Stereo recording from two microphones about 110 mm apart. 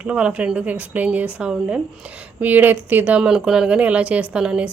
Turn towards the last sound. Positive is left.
turn(degrees=-10)  # may be behind; listen again after turning